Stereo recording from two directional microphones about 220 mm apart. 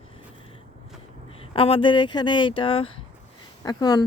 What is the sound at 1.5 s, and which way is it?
Speech, 25° left (ahead or behind).